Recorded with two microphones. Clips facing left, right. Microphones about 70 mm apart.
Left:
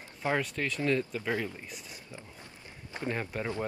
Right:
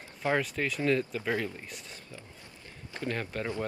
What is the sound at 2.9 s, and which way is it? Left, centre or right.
Speech, centre.